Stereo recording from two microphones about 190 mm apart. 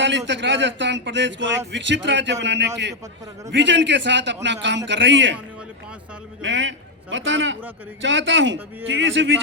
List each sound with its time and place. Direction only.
0.0 s speech: 70° right (ahead or behind)
6.4 s speech: 75° right (ahead or behind)